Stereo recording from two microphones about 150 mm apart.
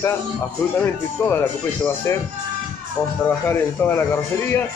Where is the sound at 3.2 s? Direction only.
15° left (ahead or behind).